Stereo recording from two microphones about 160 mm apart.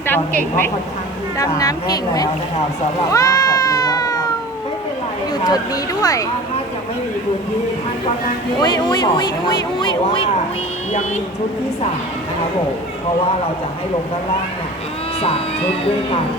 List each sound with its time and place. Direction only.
1.4 s speech: 20° left (ahead or behind)
3.1 s cat: 20° left (ahead or behind)
5.5 s speech: 20° left (ahead or behind)
8.6 s speech: 25° left (ahead or behind)
15.2 s speech: 35° left (ahead or behind)